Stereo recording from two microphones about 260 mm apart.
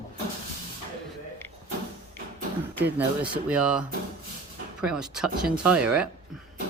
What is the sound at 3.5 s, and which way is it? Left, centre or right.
Speech, centre.